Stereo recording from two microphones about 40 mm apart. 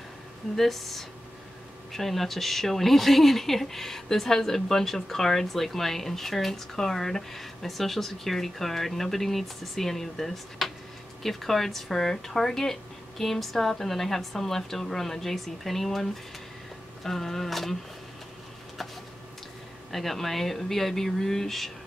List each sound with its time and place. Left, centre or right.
0.6 s speech: centre
19.9 s speech: centre